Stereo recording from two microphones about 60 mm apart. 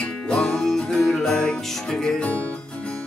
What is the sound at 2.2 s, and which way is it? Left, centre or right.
Music, left.